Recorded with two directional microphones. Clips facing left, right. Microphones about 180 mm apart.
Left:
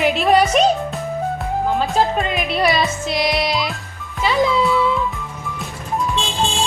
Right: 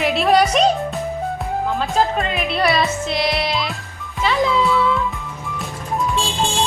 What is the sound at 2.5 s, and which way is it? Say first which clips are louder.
Speech: even; centre (ahead or behind).